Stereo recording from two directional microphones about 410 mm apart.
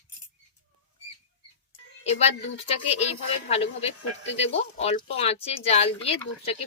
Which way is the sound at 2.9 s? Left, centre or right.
Centre.